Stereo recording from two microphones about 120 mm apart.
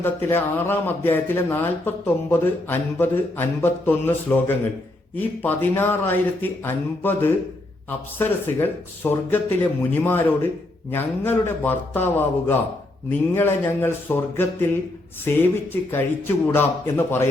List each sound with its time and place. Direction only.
0.0 s speech: 20° left (ahead or behind)